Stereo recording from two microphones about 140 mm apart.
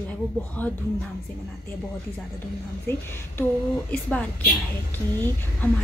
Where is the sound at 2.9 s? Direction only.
15° left (ahead or behind).